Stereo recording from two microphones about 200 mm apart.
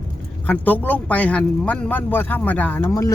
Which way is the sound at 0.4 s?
10° left (ahead or behind).